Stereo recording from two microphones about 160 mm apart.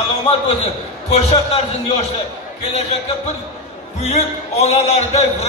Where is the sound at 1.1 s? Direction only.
40° left (ahead or behind).